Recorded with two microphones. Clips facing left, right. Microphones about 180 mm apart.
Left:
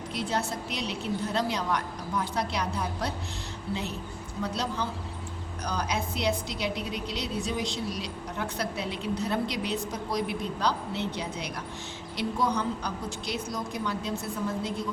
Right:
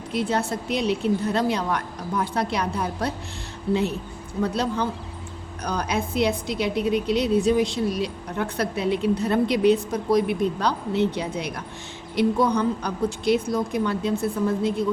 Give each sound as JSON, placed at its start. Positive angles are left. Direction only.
{"t": 0.1, "sound": "a woman's voice", "side_deg": -55}
{"t": 4.4, "sound": "a woman's voice", "side_deg": -55}